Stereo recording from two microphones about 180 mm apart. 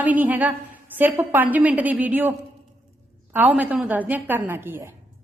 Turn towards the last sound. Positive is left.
turn(degrees=-10)  # may be behind; listen again after turning